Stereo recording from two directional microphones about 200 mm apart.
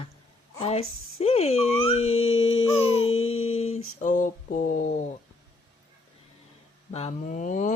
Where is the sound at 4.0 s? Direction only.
40° left (ahead or behind).